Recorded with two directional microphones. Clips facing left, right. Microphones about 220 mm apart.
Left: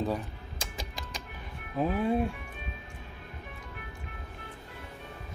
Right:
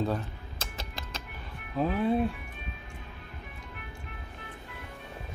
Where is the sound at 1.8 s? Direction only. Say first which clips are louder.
Right 1 dB; 10° left (ahead or behind).